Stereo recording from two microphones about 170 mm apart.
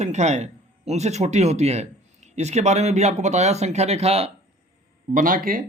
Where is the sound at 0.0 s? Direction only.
40° right (ahead or behind).